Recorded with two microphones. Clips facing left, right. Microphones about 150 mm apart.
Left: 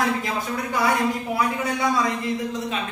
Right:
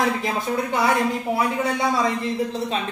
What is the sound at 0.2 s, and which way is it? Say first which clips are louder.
Speech: right 3 dB; 25° right (ahead or behind).